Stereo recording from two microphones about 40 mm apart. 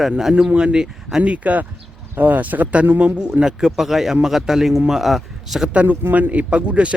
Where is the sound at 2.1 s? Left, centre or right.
Right.